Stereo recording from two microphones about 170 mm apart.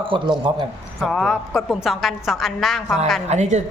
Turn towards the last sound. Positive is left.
turn(degrees=-45)  # may be behind; listen again after turning